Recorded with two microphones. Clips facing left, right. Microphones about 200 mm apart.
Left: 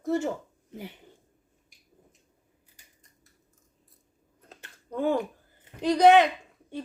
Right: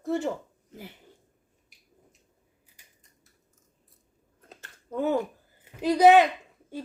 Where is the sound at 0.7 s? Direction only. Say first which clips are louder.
Left 4 dB; 20° left (ahead or behind).